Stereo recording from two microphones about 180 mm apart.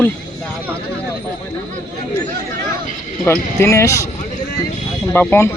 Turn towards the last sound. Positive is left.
turn(degrees=15)  # may be behind; listen again after turning